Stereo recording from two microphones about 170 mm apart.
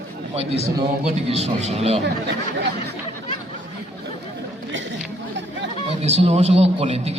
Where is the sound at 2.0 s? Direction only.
85° right.